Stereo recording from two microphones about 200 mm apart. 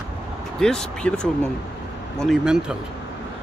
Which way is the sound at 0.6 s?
5° left (ahead or behind).